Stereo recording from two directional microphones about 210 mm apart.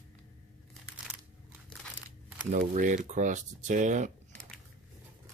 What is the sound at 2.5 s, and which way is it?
Speech, 35° right (ahead or behind).